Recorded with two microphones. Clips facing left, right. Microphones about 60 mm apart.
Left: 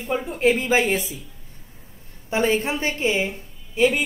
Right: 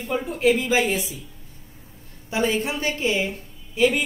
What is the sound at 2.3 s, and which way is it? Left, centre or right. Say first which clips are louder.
Speech: left 2 dB; left.